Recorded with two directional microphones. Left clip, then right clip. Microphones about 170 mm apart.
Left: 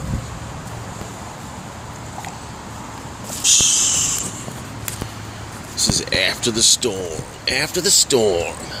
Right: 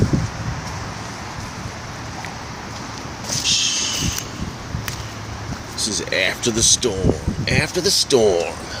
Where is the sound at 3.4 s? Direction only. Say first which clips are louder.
Left 3 dB; 15° left (ahead or behind).